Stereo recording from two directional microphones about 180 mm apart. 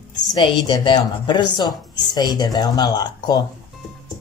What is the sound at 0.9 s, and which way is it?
Speech, 25° left (ahead or behind).